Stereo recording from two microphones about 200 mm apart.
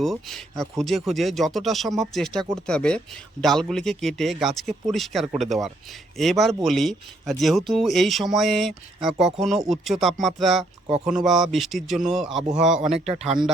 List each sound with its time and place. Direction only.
0.0 s speech: centre (ahead or behind)
12.7 s speech: 35° right (ahead or behind)